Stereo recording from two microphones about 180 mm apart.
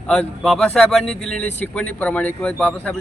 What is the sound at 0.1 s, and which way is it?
A man's voice, centre (ahead or behind).